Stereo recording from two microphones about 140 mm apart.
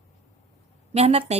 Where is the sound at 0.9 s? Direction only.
45° right (ahead or behind).